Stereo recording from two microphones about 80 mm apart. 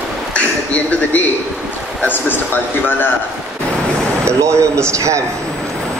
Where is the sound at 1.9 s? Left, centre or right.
Left.